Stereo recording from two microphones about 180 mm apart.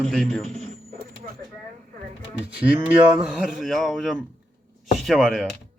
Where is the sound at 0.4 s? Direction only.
35° right (ahead or behind).